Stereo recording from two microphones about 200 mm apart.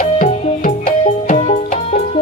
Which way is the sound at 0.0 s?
40° left (ahead or behind).